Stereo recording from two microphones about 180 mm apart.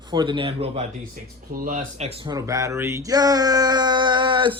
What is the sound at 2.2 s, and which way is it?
Speech, 20° right (ahead or behind).